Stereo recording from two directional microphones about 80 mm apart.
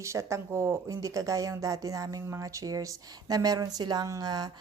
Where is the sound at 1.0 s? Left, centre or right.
Right.